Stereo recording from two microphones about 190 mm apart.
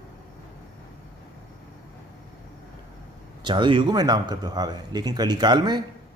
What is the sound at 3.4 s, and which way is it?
A man's voice, 25° right (ahead or behind).